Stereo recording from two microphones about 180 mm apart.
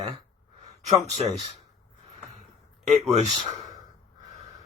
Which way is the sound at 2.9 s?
40° right (ahead or behind).